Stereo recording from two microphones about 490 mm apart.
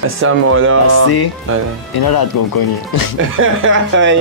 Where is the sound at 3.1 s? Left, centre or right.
Right.